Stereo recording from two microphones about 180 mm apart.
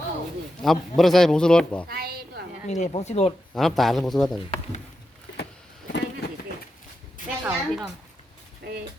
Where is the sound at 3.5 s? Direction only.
Centre (ahead or behind).